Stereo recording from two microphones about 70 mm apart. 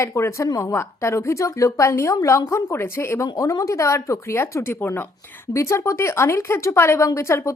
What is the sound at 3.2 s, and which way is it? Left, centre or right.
A woman's voice, left.